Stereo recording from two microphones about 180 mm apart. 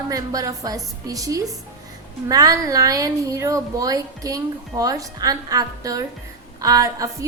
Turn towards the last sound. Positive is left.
turn(degrees=-20)  # may be behind; listen again after turning